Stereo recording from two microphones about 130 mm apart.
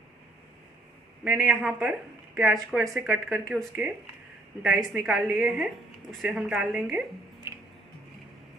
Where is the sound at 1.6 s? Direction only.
10° right (ahead or behind).